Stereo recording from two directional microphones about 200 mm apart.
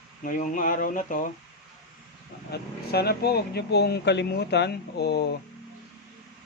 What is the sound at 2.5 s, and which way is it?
Speech, 50° left (ahead or behind).